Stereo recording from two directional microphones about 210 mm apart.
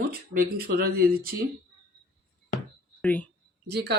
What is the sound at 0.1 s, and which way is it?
Speech, 45° right (ahead or behind).